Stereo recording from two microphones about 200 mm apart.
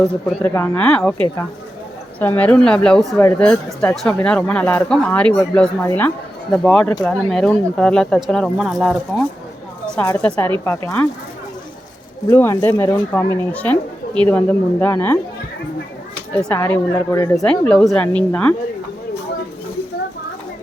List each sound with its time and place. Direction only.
0.4 s speech: 10° left (ahead or behind)
2.1 s speech: 10° left (ahead or behind)
12.3 s speech: 15° left (ahead or behind)
16.4 s speech: 10° left (ahead or behind)